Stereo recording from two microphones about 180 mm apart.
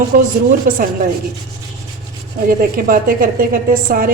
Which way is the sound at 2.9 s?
50° right (ahead or behind).